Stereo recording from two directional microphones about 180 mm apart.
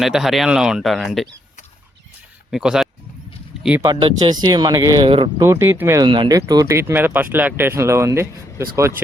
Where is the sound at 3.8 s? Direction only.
25° right (ahead or behind).